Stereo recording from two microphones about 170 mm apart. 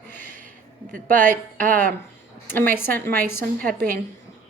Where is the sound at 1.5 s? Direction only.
55° right (ahead or behind).